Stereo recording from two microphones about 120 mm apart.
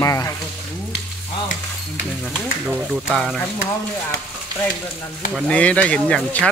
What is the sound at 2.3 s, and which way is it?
Speech, 5° right (ahead or behind).